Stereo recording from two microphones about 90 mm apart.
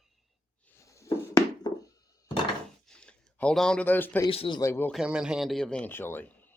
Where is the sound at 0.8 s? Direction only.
35° left (ahead or behind).